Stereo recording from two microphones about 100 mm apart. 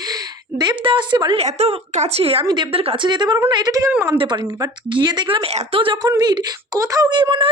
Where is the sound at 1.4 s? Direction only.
90° right; by 3.9 s 35° right (ahead or behind).